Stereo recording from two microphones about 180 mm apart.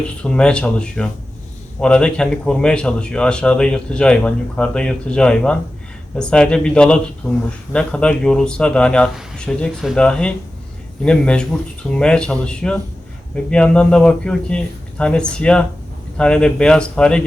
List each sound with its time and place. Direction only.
0.2 s a man's voice: 5° left (ahead or behind)